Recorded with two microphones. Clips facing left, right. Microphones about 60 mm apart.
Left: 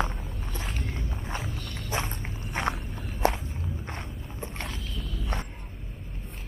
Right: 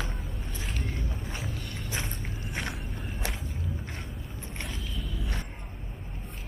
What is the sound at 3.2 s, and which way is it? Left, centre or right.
Walk, left.